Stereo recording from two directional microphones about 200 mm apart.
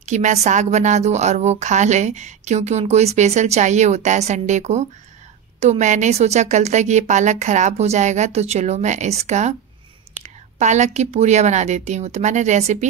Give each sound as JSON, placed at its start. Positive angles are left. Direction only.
{"t": 0.0, "sound": "a woman's voice", "side_deg": -35}